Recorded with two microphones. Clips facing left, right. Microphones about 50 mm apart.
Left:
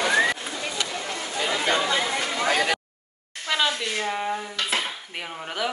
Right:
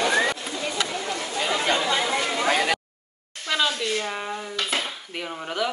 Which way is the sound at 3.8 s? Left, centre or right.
Left.